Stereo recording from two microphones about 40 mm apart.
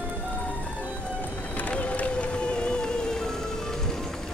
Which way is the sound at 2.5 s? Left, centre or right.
Left.